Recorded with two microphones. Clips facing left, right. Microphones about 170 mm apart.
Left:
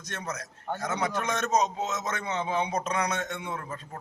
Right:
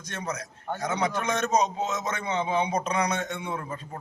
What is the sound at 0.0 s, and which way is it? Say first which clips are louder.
A man's voice: right 3 dB; centre (ahead or behind).